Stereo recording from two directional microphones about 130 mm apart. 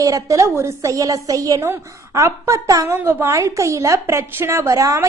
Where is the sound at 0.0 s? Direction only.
25° right (ahead or behind).